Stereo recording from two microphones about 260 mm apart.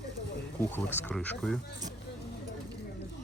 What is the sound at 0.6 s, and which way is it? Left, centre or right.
Speech, centre.